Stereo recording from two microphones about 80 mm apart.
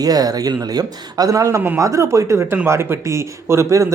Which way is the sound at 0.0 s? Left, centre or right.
Right.